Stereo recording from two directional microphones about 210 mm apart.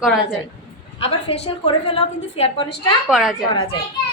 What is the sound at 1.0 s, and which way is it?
A woman's voice, 25° left (ahead or behind).